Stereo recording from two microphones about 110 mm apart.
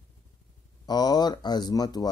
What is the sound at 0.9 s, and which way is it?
Speech, 40° left (ahead or behind).